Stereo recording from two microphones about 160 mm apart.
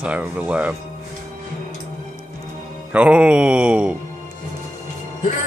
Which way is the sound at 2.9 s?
10° right (ahead or behind).